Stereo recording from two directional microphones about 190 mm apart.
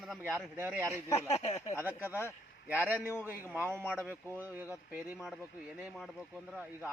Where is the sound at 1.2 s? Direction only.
35° left (ahead or behind).